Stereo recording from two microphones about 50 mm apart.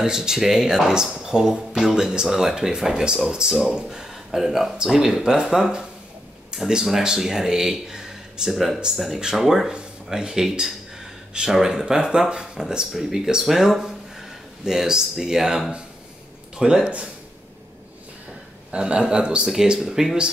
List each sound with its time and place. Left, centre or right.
0.0 s speech: centre
18.7 s a man's voice: right